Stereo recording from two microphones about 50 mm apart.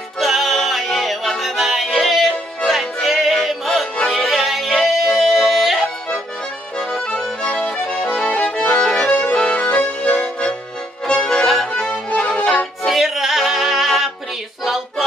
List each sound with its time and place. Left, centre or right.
0.2 s music: centre
7.4 s accordion: centre
8.2 s accordion: centre
9.1 s accordion: left
9.4 s accordion: centre
9.7 s accordion: left
10.1 s music: centre
11.2 s accordion: centre
12.1 s music: left
12.8 s music: centre
14.6 s a sound: centre